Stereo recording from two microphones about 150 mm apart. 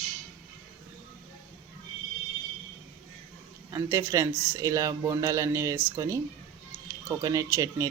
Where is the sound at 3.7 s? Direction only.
20° right (ahead or behind).